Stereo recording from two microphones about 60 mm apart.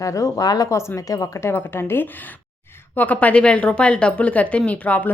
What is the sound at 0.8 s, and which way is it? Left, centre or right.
Speech, left.